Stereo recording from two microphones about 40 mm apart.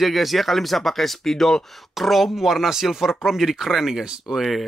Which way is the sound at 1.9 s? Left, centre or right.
Centre.